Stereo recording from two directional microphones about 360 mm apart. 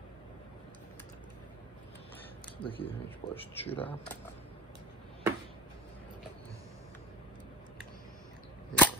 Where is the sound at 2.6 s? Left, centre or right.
Centre.